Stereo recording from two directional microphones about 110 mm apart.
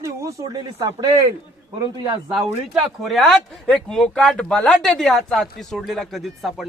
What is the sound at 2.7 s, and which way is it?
Speech, centre (ahead or behind).